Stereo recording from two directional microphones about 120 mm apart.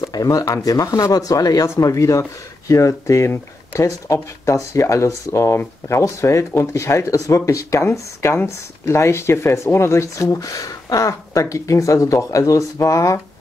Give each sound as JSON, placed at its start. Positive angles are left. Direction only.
{"t": 0.0, "sound": "speech", "side_deg": 30}